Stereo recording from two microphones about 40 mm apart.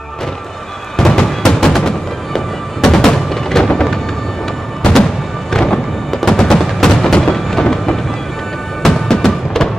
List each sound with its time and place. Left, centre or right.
0.9 s music: centre
5.5 s music: centre
6.9 s a sound: centre
8.8 s music: centre